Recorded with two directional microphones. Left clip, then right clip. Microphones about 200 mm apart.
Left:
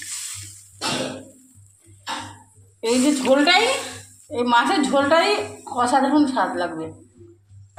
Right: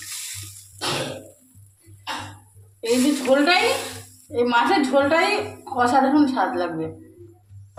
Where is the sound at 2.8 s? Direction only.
25° left (ahead or behind).